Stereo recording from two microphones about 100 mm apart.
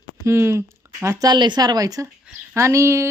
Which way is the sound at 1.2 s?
50° right (ahead or behind).